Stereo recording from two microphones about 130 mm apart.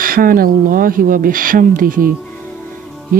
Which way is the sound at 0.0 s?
90° right.